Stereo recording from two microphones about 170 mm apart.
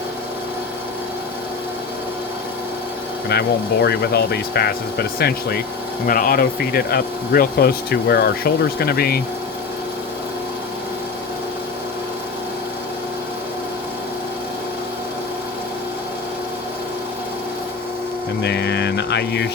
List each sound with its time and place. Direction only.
3.2 s speech: 70° left (ahead or behind)
6.1 s speech: 55° left (ahead or behind)
18.4 s speech: 85° left